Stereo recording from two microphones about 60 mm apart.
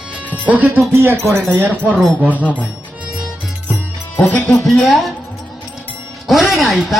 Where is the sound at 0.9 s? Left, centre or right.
Right.